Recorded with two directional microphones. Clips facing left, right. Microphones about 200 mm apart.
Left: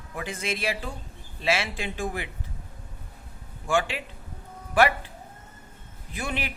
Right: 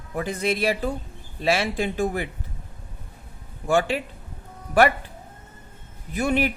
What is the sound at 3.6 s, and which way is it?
Speech, 40° right (ahead or behind).